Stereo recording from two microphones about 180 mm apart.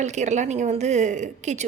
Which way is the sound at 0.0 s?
40° right (ahead or behind).